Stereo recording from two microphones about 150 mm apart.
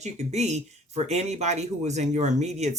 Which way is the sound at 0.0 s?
50° right (ahead or behind).